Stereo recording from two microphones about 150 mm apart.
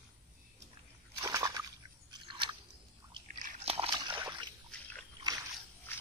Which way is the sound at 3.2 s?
65° right (ahead or behind).